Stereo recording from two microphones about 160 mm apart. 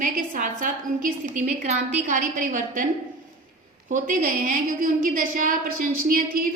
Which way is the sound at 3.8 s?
55° right (ahead or behind).